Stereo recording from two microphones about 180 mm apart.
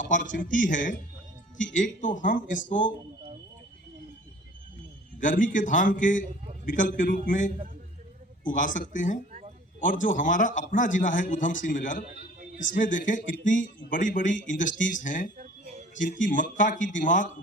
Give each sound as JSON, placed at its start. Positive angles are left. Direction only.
{"t": 0.0, "sound": "speech", "side_deg": 45}
{"t": 5.2, "sound": "speech", "side_deg": 45}